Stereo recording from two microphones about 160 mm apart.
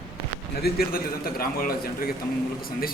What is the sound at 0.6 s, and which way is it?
A man's voice, 70° left (ahead or behind).